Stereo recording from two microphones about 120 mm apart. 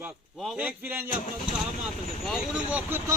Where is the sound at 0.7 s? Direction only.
15° right (ahead or behind).